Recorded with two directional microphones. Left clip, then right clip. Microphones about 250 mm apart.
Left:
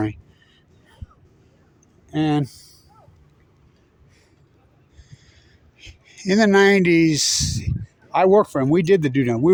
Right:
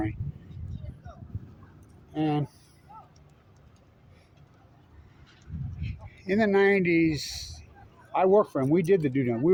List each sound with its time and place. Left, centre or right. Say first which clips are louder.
2.1 s speech: left 7 dB; left
5.8 s speech: left 10 dB; left